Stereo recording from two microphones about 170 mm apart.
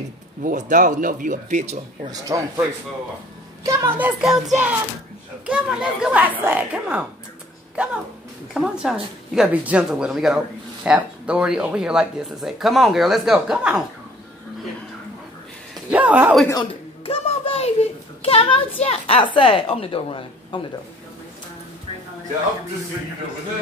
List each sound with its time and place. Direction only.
0.4 s speech: 50° right (ahead or behind)
2.0 s a child's voice: 20° right (ahead or behind)
5.5 s a child's voice: 5° right (ahead or behind)
15.9 s a child's voice: 10° right (ahead or behind)
17.0 s a sound: 35° left (ahead or behind)
18.2 s a woman's voice: 35° left (ahead or behind)